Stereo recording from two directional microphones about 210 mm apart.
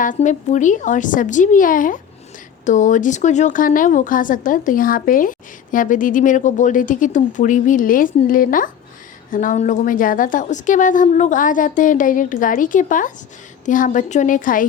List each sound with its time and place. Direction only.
0.0 s a woman's voice: 35° left (ahead or behind)